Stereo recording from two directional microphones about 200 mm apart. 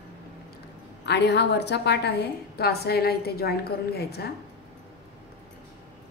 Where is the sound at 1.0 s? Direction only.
60° left (ahead or behind).